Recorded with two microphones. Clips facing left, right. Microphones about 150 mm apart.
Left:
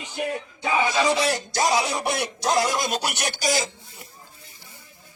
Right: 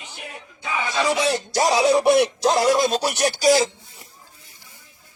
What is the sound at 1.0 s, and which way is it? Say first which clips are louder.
Speech: right 1 dB; 15° right (ahead or behind).